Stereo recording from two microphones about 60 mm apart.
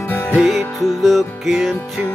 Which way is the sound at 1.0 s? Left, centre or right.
Centre.